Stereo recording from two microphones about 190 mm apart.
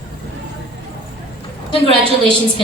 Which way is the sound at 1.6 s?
25° right (ahead or behind).